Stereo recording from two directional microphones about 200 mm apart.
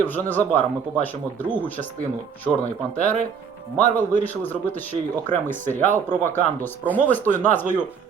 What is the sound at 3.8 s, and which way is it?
Speech, 40° right (ahead or behind).